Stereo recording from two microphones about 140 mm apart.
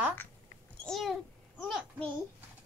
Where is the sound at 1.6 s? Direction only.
5° left (ahead or behind).